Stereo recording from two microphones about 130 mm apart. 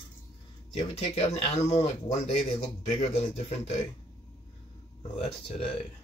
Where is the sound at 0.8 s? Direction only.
55° left (ahead or behind).